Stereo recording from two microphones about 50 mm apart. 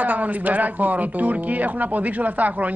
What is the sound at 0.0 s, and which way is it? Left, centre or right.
Speech, right.